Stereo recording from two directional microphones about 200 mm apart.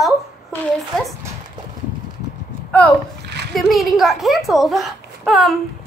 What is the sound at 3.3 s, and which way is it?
Splash, 55° right (ahead or behind).